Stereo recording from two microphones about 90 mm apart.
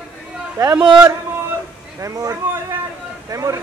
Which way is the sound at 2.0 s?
35° right (ahead or behind).